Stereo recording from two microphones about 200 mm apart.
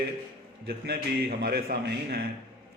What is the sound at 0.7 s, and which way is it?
A man's voice, 50° right (ahead or behind).